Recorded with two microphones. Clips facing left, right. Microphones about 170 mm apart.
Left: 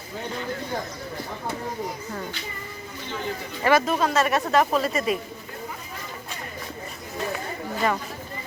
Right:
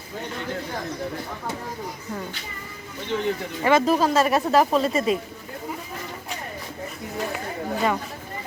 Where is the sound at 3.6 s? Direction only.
15° right (ahead or behind).